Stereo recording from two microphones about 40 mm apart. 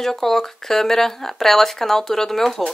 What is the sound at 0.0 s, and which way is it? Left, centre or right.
Speech, centre.